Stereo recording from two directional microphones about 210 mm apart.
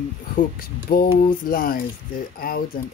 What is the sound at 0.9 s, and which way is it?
Speech, 45° left (ahead or behind).